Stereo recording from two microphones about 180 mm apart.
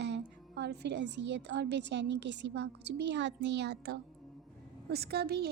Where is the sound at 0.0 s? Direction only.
75° right (ahead or behind).